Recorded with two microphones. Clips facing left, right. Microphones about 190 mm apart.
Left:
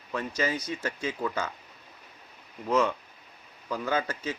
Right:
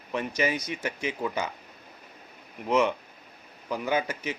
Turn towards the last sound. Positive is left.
turn(degrees=-15)  # may be behind; listen again after turning